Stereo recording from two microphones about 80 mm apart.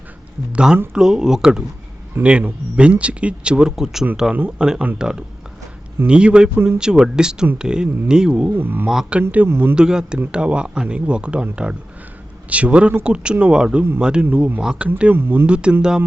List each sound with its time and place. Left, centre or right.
0.5 s a man's voice: centre
2.2 s a man's voice: right
2.7 s a man's voice: centre
8.5 s speech: right
8.9 s a man's voice: centre
9.5 s speech: right
9.7 s a man's voice: centre
15.1 s speech: right
15.4 s a man's voice: centre